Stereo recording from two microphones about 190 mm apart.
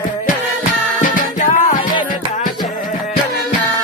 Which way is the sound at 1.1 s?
40° left (ahead or behind).